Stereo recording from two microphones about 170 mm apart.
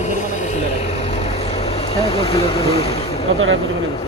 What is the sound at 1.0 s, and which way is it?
Vehicle, 35° left (ahead or behind).